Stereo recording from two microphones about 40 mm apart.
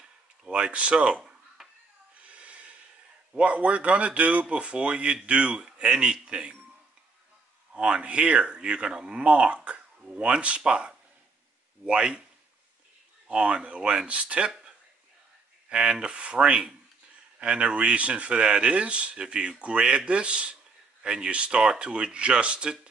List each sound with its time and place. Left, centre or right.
0.0 s a sound: right
1.6 s a sound: centre
2.2 s snort: right
3.3 s a man's voice: right
7.7 s a man's voice: right
13.3 s a man's voice: right
15.7 s a man's voice: right